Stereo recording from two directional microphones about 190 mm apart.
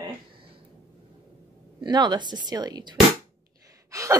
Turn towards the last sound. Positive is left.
turn(degrees=-15)  # may be behind; listen again after turning